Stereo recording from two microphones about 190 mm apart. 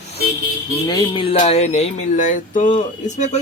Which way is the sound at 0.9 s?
25° left (ahead or behind).